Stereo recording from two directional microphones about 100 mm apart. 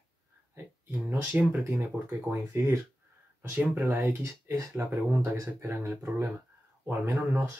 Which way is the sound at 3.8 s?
30° right (ahead or behind).